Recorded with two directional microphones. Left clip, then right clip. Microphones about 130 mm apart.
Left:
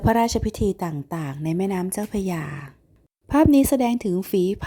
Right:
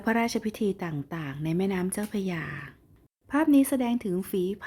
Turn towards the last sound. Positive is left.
turn(degrees=45)  # may be behind; listen again after turning